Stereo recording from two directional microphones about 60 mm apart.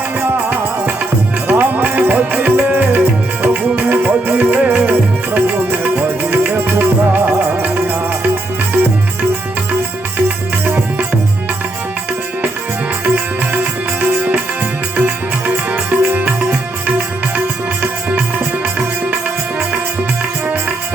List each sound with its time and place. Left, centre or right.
0.2 s music: right
14.9 s music: right